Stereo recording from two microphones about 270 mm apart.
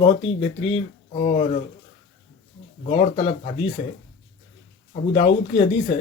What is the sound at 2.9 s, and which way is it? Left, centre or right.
Speech, centre.